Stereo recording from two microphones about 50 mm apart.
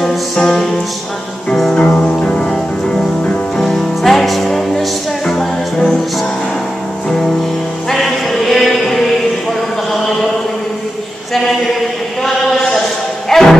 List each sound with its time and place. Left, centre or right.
0.0 s music: centre
1.8 s music: left
2.5 s music: centre
7.9 s chant: centre
12.2 s chant: centre
13.3 s music: centre